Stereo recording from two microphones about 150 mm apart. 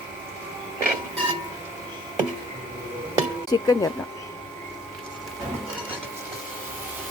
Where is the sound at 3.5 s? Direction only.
25° left (ahead or behind).